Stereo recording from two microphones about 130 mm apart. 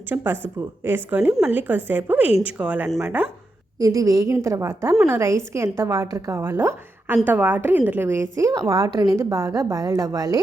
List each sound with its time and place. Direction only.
0.1 s a woman's voice: 15° right (ahead or behind)
3.8 s a woman's voice: 25° right (ahead or behind)